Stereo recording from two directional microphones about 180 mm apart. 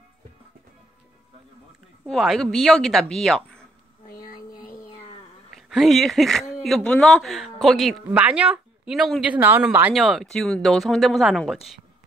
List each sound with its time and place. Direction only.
2.0 s speech: centre (ahead or behind)
4.1 s a sound: 50° left (ahead or behind)
5.5 s speech: centre (ahead or behind)